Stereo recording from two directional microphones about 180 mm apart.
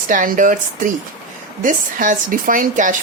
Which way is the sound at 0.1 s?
45° right (ahead or behind).